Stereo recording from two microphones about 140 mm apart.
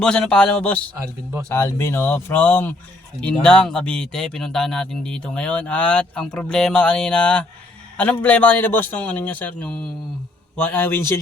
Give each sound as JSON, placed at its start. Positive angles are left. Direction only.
{"t": 0.0, "sound": "speech", "side_deg": 5}
{"t": 0.9, "sound": "speech", "side_deg": -20}
{"t": 1.5, "sound": "speech", "side_deg": 15}